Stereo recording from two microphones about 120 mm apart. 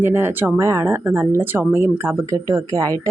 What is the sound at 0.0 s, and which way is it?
Speech, 15° right (ahead or behind).